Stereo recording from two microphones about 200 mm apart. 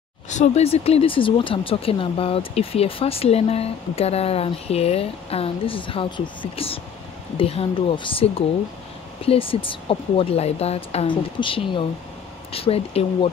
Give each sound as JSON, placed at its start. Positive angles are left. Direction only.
{"t": 0.3, "sound": "speech", "side_deg": 35}